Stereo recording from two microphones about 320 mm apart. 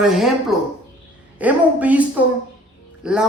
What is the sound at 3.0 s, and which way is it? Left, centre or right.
Speech, centre.